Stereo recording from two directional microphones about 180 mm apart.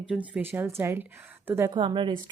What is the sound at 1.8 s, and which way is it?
Speech, 25° right (ahead or behind).